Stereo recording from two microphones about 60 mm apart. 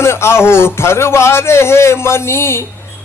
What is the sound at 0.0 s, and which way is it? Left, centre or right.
Music, left.